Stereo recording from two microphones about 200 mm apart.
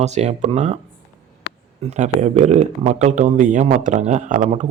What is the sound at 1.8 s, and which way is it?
A man's voice, 35° right (ahead or behind).